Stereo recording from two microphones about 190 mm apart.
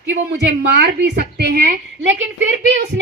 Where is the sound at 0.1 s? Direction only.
65° right (ahead or behind).